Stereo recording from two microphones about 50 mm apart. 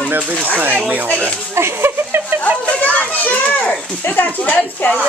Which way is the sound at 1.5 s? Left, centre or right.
Right.